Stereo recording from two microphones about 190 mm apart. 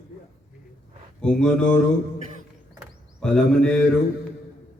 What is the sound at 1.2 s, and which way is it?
Speech, 5° left (ahead or behind).